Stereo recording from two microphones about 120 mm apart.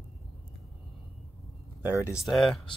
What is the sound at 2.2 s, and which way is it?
Speech, centre (ahead or behind).